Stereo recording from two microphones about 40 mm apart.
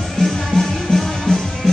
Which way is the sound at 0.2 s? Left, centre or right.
Centre.